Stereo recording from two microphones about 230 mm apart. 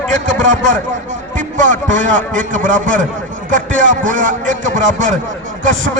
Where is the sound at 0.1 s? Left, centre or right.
Right.